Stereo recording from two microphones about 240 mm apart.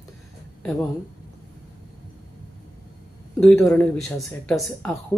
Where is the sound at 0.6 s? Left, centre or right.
Centre.